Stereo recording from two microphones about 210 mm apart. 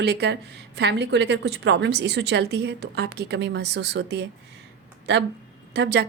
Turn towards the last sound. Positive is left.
turn(degrees=-55)  # may be behind; listen again after turning